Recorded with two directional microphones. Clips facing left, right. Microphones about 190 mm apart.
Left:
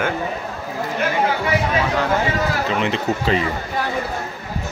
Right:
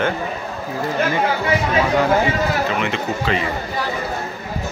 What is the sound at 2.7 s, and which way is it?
Speech, 30° left (ahead or behind).